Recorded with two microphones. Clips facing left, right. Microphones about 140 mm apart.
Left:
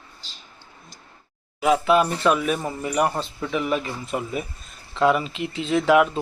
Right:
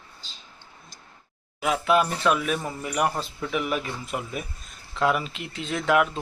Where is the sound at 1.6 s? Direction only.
Centre (ahead or behind).